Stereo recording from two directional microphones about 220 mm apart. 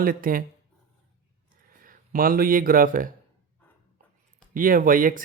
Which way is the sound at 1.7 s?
40° right (ahead or behind).